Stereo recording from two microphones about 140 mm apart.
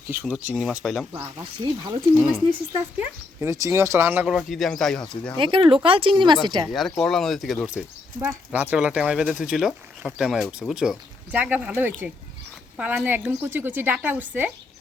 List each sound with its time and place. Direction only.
0.1 s speech: 10° right (ahead or behind)
1.6 s speech: 30° right (ahead or behind)
3.4 s a woman's voice: 20° right (ahead or behind)
4.4 s speech: centre (ahead or behind)
5.4 s speech: 35° right (ahead or behind)
6.7 s a woman's voice: centre (ahead or behind)